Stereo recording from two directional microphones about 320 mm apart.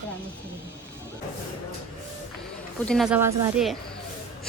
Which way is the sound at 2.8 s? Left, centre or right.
Centre.